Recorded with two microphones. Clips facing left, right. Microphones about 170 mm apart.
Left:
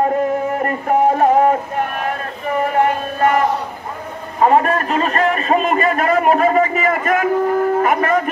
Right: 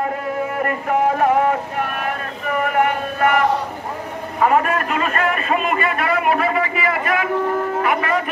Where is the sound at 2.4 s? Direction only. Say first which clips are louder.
Left 2 dB; 30° left (ahead or behind).